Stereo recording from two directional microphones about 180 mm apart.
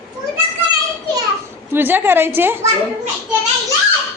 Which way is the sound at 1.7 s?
10° right (ahead or behind).